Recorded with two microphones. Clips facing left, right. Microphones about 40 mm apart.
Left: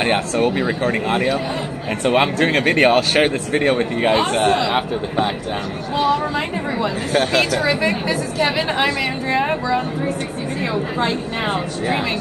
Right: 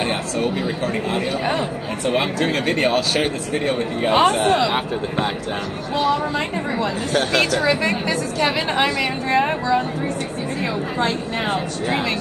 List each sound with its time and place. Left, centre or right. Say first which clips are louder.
0.0 s speech: left 4 dB; left
4.3 s a woman's voice: left 1 dB; centre